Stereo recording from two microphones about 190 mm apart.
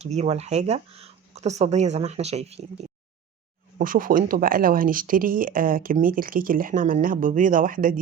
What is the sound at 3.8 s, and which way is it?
Speech, 45° right (ahead or behind).